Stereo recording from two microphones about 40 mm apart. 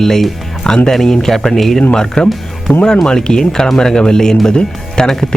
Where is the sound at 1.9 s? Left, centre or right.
Centre.